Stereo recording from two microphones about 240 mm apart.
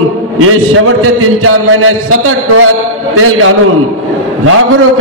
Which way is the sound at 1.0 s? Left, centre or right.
Right.